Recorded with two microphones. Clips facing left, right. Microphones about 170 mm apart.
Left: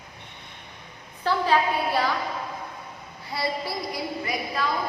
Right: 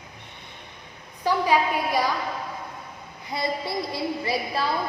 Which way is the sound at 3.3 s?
20° right (ahead or behind).